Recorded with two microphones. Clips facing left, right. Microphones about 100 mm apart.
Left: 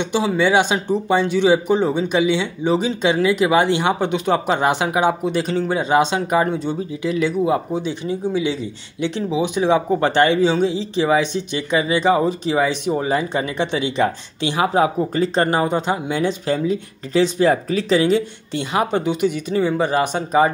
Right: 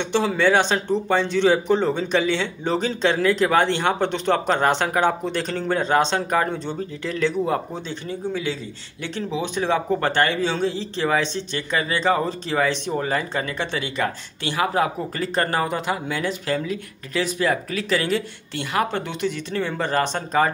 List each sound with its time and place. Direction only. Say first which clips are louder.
0.0 s speech: left 2 dB; 10° left (ahead or behind)